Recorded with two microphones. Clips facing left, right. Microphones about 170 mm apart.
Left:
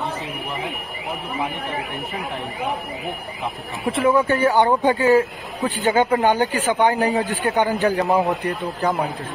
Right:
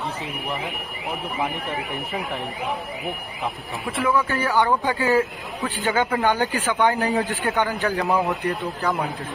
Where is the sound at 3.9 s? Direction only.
25° left (ahead or behind).